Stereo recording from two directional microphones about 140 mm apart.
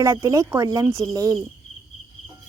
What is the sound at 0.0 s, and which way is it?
Speech, 20° right (ahead or behind).